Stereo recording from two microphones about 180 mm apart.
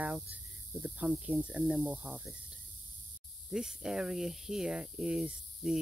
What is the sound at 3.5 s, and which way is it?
Speech, 5° right (ahead or behind).